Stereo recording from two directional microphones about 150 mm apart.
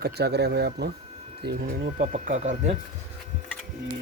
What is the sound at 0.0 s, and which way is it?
Speech, 90° right.